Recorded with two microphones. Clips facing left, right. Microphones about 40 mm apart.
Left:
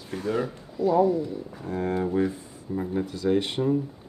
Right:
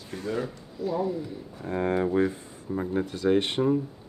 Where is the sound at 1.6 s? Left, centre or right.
Right.